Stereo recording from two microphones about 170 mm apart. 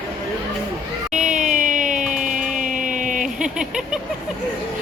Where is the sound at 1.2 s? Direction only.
5° right (ahead or behind).